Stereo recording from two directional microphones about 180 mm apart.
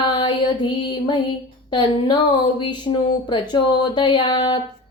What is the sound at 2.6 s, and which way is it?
Female singing, 25° left (ahead or behind).